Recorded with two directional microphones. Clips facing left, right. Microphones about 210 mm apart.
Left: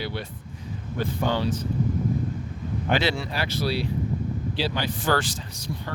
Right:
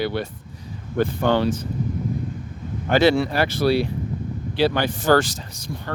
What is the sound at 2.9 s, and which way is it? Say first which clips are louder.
Speech: right 8 dB; 45° right (ahead or behind).